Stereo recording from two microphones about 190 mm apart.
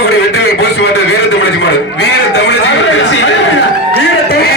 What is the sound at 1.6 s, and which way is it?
A man's voice, 65° left (ahead or behind).